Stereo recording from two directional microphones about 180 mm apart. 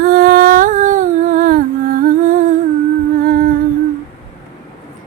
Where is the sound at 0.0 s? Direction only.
55° right (ahead or behind).